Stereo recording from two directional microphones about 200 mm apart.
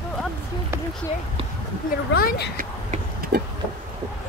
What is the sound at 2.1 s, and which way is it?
Speech, 50° left (ahead or behind).